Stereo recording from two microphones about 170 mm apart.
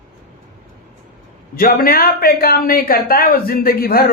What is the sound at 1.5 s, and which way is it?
A woman's voice, 55° left (ahead or behind).